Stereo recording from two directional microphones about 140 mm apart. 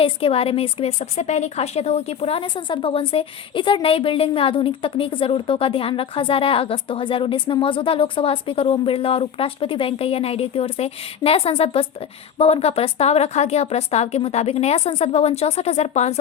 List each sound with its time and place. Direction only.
0.0 s a woman's voice: 40° left (ahead or behind)